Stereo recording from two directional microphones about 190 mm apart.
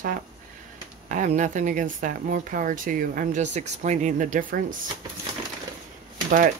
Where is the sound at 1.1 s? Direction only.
40° right (ahead or behind).